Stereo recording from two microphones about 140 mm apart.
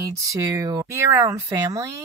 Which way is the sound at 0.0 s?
25° right (ahead or behind).